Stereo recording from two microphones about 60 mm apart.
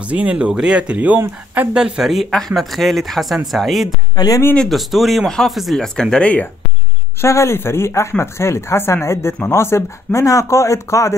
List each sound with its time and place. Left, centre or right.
0.0 s speech: right
1.8 s speech: centre
5.8 s speech: centre
7.2 s speech: left